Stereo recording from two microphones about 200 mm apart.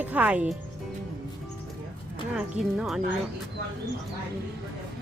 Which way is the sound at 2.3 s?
5° right (ahead or behind).